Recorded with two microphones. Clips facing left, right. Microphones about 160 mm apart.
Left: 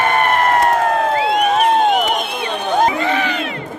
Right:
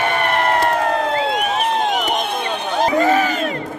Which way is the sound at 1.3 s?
50° left (ahead or behind).